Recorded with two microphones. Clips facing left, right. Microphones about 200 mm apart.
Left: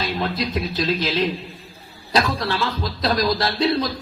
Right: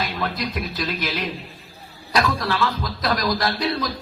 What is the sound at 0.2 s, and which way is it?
Music, 30° left (ahead or behind).